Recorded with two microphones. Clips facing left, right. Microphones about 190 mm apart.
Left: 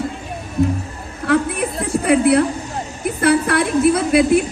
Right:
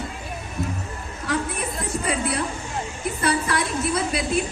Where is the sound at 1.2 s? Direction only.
60° left (ahead or behind).